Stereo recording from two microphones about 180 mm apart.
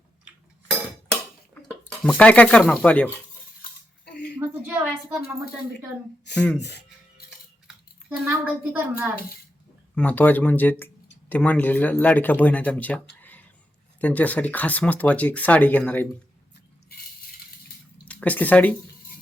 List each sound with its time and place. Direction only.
0.3 s cutlery: centre (ahead or behind)
1.9 s speech: 5° left (ahead or behind)
3.6 s dishes: 60° left (ahead or behind)
4.4 s a sound: 10° right (ahead or behind)
6.3 s speech: 5° left (ahead or behind)
8.1 s a woman's voice: 10° right (ahead or behind)
9.9 s speech: 10° left (ahead or behind)
18.0 s speech: 5° left (ahead or behind)